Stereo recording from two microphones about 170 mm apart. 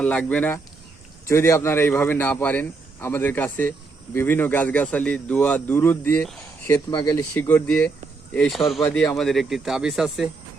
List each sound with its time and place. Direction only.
0.0 s a man's voice: 5° left (ahead or behind)
6.7 s speech: 25° left (ahead or behind)
7.3 s a man's voice: 10° left (ahead or behind)